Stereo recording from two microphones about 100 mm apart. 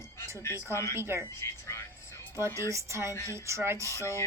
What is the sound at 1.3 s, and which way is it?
Music, 25° left (ahead or behind).